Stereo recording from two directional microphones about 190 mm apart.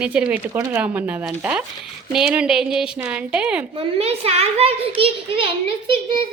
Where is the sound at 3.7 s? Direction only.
30° right (ahead or behind).